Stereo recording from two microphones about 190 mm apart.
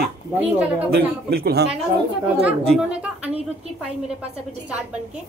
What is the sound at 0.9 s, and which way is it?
Speech, 55° right (ahead or behind).